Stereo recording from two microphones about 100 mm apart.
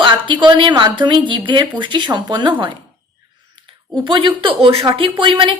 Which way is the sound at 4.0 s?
55° right (ahead or behind).